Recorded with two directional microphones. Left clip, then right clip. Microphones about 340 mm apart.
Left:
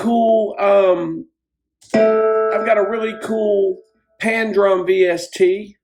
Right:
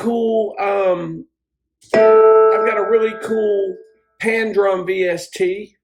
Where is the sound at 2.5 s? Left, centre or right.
Centre.